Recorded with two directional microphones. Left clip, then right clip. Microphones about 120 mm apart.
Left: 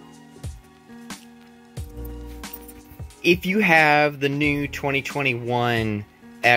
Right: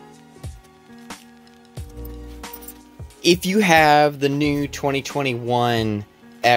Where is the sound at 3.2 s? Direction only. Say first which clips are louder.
Right 2 dB; 25° right (ahead or behind).